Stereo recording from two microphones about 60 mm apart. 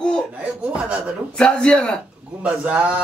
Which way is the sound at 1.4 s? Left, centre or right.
Centre.